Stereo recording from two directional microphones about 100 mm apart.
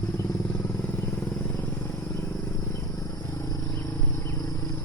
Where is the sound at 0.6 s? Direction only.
20° left (ahead or behind).